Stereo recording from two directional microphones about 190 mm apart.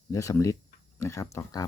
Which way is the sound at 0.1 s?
15° left (ahead or behind).